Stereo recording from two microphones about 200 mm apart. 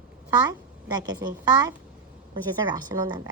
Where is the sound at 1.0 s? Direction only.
20° right (ahead or behind).